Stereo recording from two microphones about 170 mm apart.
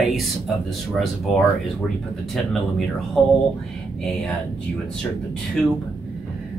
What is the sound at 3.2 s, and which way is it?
Speech, centre (ahead or behind).